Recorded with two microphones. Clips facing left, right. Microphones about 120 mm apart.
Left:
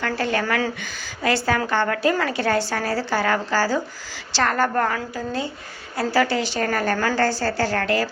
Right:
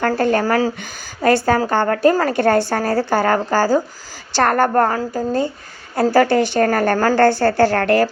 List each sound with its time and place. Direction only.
0.0 s a woman's voice: 45° right (ahead or behind)